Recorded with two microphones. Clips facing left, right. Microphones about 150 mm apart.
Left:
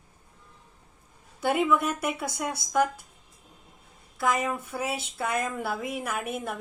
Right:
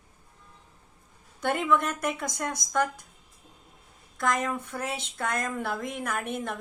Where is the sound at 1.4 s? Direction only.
5° left (ahead or behind).